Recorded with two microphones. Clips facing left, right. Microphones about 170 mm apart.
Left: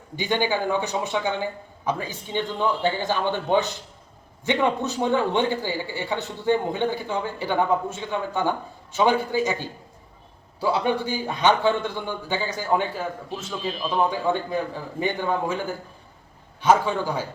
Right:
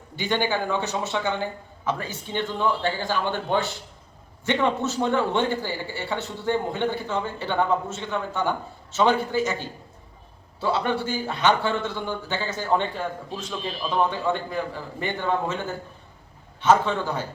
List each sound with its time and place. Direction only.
0.2 s a man's voice: 15° left (ahead or behind)
10.6 s a man's voice: 15° left (ahead or behind)